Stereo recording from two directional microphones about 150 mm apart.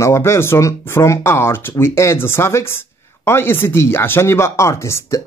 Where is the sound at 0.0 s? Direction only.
20° left (ahead or behind).